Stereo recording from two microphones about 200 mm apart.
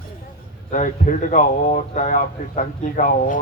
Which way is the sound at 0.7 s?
40° left (ahead or behind).